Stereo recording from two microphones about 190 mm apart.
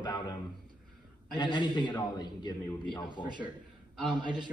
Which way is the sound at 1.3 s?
25° left (ahead or behind).